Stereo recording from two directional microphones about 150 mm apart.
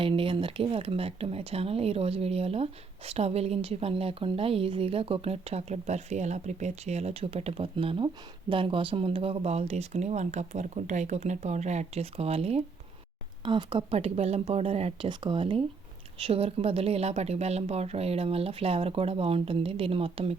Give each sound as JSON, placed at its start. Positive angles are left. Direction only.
{"t": 0.0, "sound": "a woman's voice", "side_deg": -35}
{"t": 13.4, "sound": "speech", "side_deg": -30}